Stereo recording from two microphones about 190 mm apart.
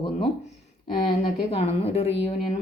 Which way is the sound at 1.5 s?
30° left (ahead or behind).